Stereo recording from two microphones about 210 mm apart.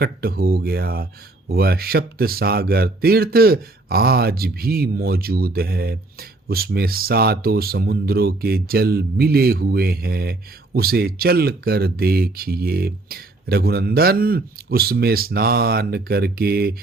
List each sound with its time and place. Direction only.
0.0 s speech: 45° right (ahead or behind)